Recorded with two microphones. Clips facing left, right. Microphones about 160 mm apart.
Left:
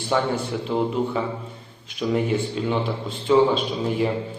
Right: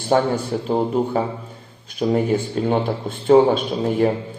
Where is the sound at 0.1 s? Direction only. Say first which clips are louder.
Right 5 dB; 45° right (ahead or behind).